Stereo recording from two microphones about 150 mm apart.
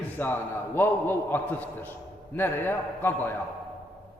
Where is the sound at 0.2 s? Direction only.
15° left (ahead or behind).